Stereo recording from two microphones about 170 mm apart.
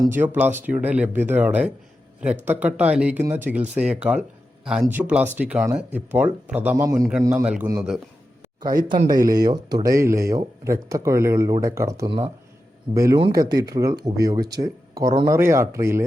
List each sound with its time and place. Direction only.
0.0 s speech: 10° right (ahead or behind)
8.6 s speech: 25° right (ahead or behind)